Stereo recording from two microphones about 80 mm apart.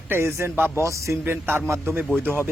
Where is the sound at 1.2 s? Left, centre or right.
Right.